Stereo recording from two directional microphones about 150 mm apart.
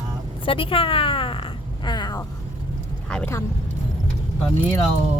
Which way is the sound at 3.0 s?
5° left (ahead or behind).